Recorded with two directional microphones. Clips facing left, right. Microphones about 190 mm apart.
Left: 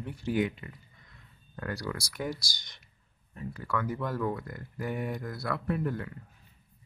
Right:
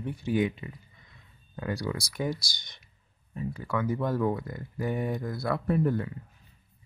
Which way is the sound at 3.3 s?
20° right (ahead or behind).